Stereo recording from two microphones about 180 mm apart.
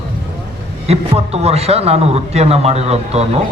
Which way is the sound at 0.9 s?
35° right (ahead or behind).